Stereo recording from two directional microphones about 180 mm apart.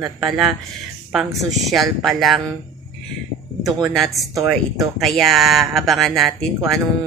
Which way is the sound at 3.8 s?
Centre (ahead or behind).